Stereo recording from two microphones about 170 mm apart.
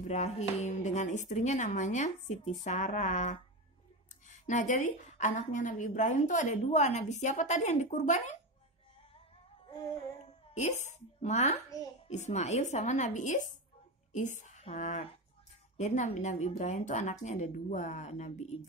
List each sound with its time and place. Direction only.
0.0 s a woman's voice: 45° left (ahead or behind)
10.5 s a woman's voice: 45° left (ahead or behind)